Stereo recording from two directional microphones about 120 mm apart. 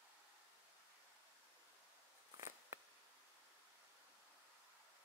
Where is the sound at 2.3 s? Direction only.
25° right (ahead or behind).